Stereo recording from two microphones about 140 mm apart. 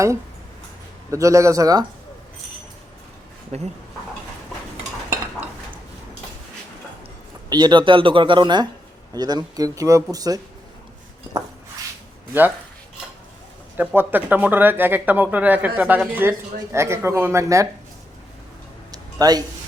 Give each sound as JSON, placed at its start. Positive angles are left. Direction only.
{"t": 1.1, "sound": "speech", "side_deg": -20}
{"t": 3.5, "sound": "speech", "side_deg": -50}
{"t": 7.5, "sound": "speech", "side_deg": -30}
{"t": 13.7, "sound": "speech", "side_deg": -15}
{"t": 18.9, "sound": "a sound", "side_deg": -25}